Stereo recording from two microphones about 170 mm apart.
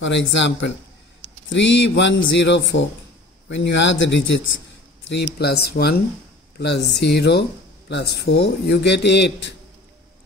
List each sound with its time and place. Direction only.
0.0 s speech: 90° left; by 5.9 s 70° left (ahead or behind)
6.6 s a man's voice: 80° left